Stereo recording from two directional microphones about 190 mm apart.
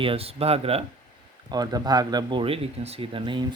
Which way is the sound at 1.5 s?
20° right (ahead or behind).